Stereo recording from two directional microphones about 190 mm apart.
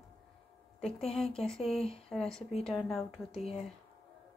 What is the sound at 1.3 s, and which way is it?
Speech, 5° left (ahead or behind).